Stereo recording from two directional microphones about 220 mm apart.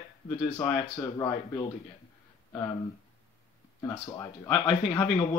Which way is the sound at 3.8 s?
15° left (ahead or behind).